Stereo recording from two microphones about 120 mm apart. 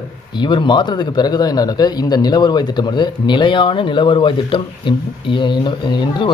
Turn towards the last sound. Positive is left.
turn(degrees=40)  # may be behind; listen again after turning